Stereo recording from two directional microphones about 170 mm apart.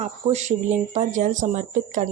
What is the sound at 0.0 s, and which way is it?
Speech, 45° right (ahead or behind).